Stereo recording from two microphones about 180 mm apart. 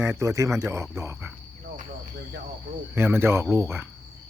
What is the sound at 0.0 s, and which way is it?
Speech, 15° right (ahead or behind).